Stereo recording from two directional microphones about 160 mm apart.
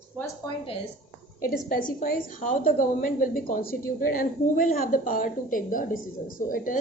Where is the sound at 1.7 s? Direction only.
60° left (ahead or behind).